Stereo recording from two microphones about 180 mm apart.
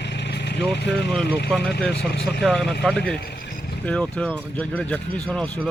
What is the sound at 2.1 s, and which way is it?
Speech, 60° left (ahead or behind).